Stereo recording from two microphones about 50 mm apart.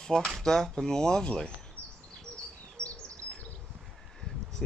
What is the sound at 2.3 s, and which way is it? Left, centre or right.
Bird, centre.